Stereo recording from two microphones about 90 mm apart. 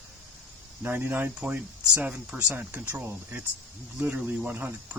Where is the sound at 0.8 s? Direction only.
20° right (ahead or behind).